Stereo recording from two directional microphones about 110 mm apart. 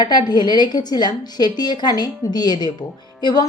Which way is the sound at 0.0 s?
40° left (ahead or behind).